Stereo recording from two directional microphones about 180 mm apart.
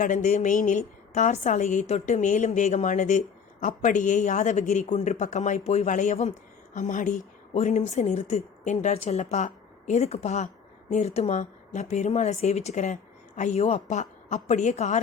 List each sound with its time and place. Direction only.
0.0 s a woman's voice: 45° left (ahead or behind)